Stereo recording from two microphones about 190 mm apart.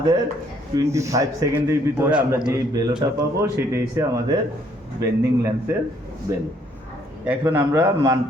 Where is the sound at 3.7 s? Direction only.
15° right (ahead or behind).